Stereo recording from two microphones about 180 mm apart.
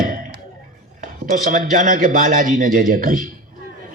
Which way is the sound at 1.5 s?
45° right (ahead or behind).